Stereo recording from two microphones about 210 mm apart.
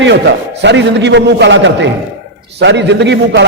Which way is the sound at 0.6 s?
55° right (ahead or behind).